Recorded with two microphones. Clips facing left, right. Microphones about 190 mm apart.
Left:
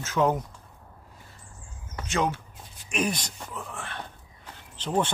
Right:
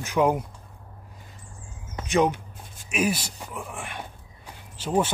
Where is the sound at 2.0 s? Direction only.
15° right (ahead or behind).